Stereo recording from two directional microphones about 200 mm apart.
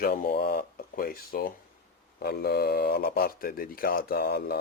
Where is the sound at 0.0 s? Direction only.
45° left (ahead or behind).